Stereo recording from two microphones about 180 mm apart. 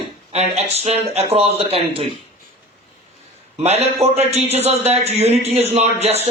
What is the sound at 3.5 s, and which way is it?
A man's voice, 35° right (ahead or behind).